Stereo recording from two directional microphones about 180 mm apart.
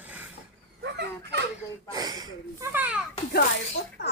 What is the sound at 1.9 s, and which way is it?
Speech, 20° right (ahead or behind).